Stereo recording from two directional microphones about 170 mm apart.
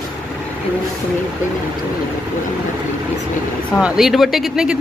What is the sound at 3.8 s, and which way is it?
Speech, 5° right (ahead or behind).